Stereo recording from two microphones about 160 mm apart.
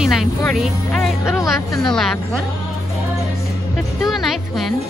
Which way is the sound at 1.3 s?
20° left (ahead or behind).